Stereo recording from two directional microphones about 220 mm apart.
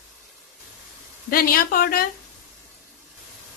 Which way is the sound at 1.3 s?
40° left (ahead or behind).